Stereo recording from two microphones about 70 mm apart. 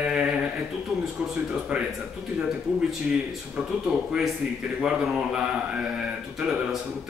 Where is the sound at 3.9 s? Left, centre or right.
Centre.